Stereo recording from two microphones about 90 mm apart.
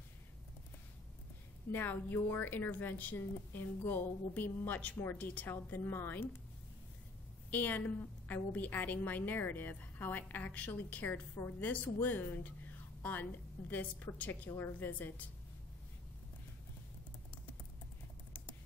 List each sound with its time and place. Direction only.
1.7 s a woman's voice: 25° left (ahead or behind)
7.5 s a woman's voice: 20° left (ahead or behind)